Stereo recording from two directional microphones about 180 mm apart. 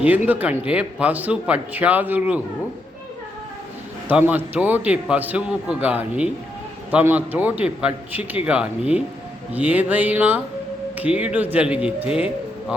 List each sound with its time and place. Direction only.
0.3 s a man's voice: 10° right (ahead or behind)
4.1 s a man's voice: 10° right (ahead or behind)